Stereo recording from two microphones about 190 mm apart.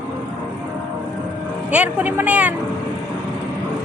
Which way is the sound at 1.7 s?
10° right (ahead or behind).